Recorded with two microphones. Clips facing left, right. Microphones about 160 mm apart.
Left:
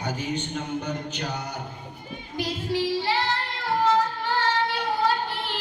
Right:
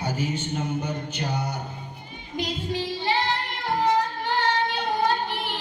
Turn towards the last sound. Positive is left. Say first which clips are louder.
# right 1 dB
turn(degrees=-15)  # may be behind; listen again after turning